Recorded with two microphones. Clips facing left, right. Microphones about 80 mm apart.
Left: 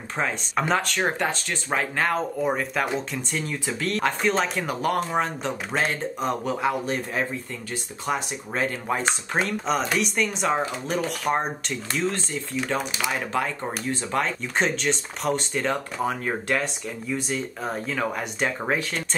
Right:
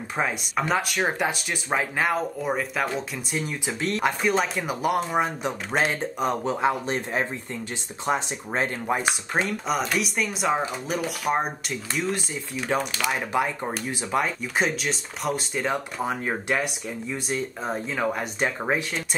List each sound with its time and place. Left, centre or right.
0.6 s speech: centre
3.3 s speech: centre
4.2 s speech: centre; by 8.7 s right
8.8 s speech: centre
17.6 s speech: centre